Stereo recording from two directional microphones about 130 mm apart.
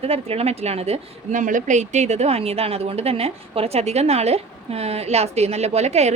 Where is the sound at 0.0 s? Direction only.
50° right (ahead or behind).